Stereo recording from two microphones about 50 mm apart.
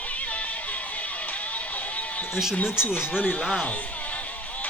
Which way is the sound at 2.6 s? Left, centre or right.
Left.